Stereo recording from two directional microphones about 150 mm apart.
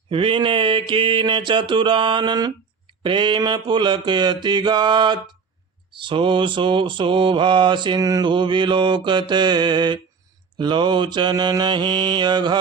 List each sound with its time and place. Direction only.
0.1 s mantra: 35° right (ahead or behind)